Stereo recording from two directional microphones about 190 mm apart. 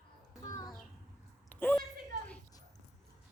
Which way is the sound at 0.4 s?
20° left (ahead or behind).